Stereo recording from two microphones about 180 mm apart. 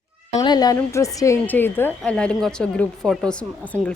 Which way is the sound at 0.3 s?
20° left (ahead or behind).